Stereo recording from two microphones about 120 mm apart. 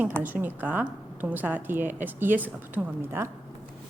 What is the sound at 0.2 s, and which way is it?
A woman's voice, 15° right (ahead or behind).